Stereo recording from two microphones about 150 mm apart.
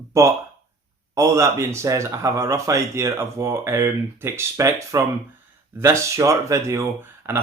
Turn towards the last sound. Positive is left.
turn(degrees=-15)  # may be behind; listen again after turning